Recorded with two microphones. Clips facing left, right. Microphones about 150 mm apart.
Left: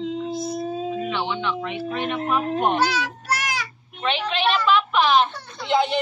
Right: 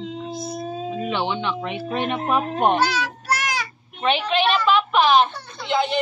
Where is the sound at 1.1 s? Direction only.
20° right (ahead or behind).